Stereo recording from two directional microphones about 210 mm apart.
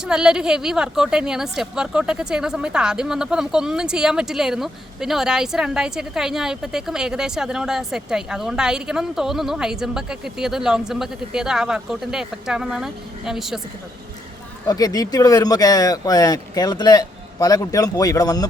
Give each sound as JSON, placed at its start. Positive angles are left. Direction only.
{"t": 0.0, "sound": "a woman's voice", "side_deg": -5}
{"t": 14.7, "sound": "speech", "side_deg": 20}